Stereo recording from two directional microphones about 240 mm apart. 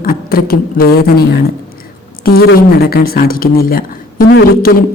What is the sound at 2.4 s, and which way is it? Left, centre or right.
Speech, left.